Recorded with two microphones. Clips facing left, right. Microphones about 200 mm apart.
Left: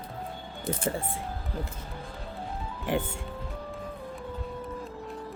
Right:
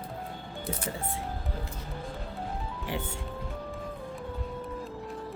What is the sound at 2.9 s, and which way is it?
Speech, 50° left (ahead or behind).